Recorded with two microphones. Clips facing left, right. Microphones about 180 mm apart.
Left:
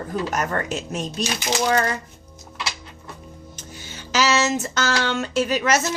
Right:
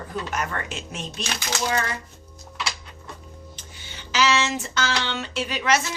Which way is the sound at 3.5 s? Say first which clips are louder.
Left 5 dB; 40° left (ahead or behind).